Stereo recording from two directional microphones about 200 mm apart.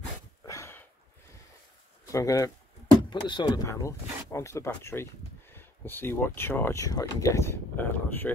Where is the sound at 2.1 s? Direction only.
15° left (ahead or behind).